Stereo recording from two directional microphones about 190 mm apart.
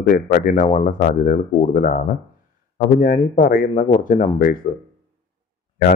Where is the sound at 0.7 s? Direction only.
35° left (ahead or behind).